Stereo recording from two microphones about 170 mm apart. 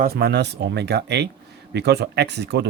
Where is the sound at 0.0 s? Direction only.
65° right (ahead or behind).